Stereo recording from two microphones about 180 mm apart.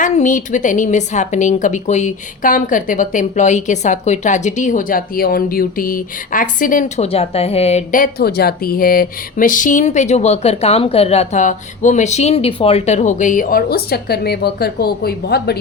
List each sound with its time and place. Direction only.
0.0 s a woman's voice: 45° left (ahead or behind); by 15.5 s 60° left (ahead or behind)